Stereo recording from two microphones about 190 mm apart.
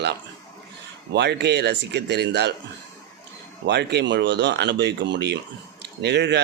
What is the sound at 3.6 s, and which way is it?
Speech, 60° right (ahead or behind).